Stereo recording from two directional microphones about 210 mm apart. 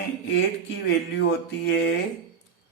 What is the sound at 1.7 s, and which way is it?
Speech, 55° left (ahead or behind).